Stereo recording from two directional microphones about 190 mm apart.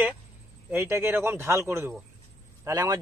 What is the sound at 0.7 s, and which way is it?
Speech, 10° right (ahead or behind).